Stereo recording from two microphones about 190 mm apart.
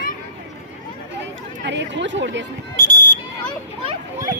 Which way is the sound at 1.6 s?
70° right (ahead or behind).